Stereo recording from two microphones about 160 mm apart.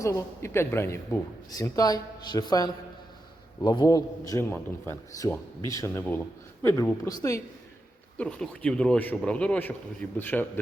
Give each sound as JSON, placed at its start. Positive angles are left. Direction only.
{"t": 0.0, "sound": "a man's voice", "side_deg": 20}
{"t": 8.2, "sound": "a man's voice", "side_deg": 5}